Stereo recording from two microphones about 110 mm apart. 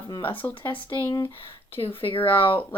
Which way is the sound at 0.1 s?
50° left (ahead or behind).